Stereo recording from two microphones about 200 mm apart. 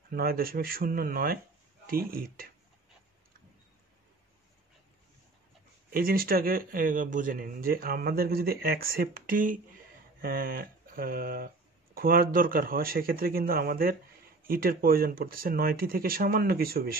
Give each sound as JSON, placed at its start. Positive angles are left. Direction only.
{"t": 0.1, "sound": "speech", "side_deg": -45}
{"t": 5.9, "sound": "speech", "side_deg": -45}